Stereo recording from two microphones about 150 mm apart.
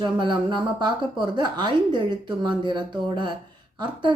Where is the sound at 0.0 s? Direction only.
30° right (ahead or behind).